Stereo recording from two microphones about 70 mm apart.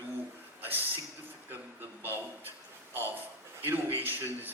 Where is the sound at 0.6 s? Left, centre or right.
Right.